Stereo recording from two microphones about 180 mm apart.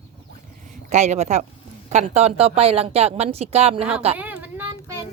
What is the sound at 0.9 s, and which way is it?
Speech, 40° right (ahead or behind).